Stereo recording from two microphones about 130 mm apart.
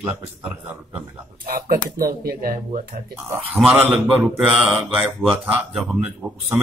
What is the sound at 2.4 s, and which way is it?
Speech, 70° right (ahead or behind).